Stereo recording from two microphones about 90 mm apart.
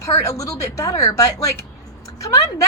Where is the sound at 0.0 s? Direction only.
35° left (ahead or behind).